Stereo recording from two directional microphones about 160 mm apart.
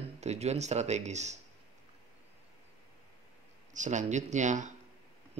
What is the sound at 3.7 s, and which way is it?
Speech, 50° right (ahead or behind).